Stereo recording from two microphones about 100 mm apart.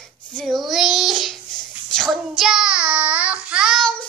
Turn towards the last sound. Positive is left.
turn(degrees=-5)  # may be behind; listen again after turning